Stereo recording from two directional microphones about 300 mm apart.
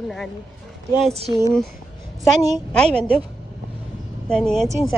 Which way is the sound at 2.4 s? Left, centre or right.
Centre.